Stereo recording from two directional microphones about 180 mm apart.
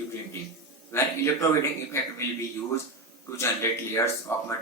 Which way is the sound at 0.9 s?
15° left (ahead or behind).